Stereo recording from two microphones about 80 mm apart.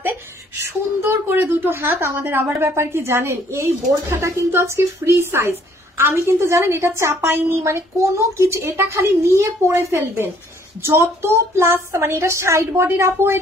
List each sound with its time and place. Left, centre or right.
1.0 s a woman's voice: right